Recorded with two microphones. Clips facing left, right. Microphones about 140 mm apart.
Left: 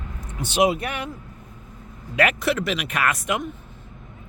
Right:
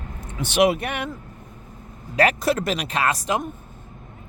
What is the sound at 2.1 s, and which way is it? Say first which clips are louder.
Speech: right 2 dB; 35° right (ahead or behind).